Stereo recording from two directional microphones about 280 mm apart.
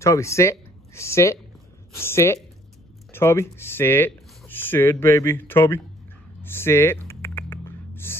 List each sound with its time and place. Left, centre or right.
0.0 s speech: centre
6.4 s typing: centre